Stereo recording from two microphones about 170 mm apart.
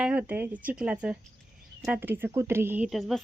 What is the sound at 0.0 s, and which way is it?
Speech, 10° right (ahead or behind).